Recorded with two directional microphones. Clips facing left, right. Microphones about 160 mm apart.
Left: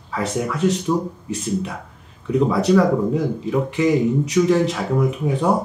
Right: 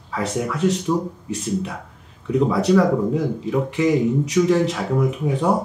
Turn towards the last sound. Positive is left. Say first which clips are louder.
# left 1 dB
turn(degrees=25)  # may be behind; listen again after turning